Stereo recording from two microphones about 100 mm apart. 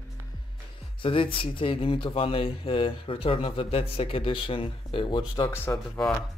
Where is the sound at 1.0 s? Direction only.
60° left (ahead or behind).